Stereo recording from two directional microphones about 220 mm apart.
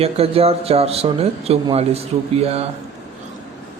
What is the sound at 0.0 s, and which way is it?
A man's voice, 25° right (ahead or behind).